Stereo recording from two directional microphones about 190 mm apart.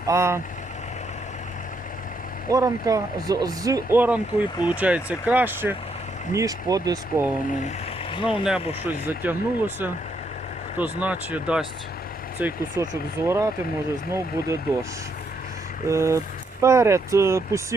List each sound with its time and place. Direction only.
0.1 s speech: 15° right (ahead or behind)
2.5 s speech: 20° right (ahead or behind)
8.1 s speech: 25° left (ahead or behind)
8.9 s speech: 10° right (ahead or behind)
15.9 s speech: 15° right (ahead or behind)